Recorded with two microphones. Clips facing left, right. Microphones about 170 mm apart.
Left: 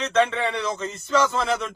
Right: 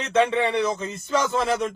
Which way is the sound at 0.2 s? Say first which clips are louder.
Right 2 dB; 10° right (ahead or behind).